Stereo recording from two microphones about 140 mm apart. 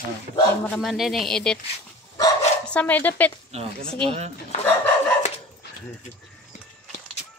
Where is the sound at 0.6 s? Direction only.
Centre (ahead or behind).